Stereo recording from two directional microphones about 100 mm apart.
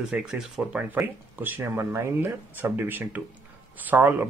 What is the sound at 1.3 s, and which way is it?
Speech, 20° right (ahead or behind).